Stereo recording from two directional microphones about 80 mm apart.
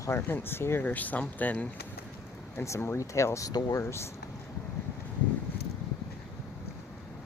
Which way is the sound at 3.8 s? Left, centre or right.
Left.